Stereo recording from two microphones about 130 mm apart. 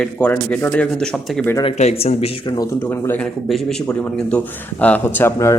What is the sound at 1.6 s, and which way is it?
Speech, 50° left (ahead or behind).